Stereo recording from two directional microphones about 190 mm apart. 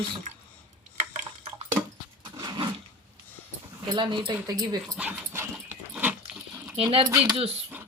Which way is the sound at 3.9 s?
25° right (ahead or behind).